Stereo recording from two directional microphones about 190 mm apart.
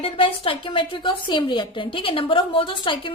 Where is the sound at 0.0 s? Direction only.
30° left (ahead or behind).